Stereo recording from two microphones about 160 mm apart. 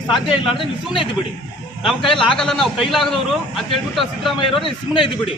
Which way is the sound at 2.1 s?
Centre (ahead or behind).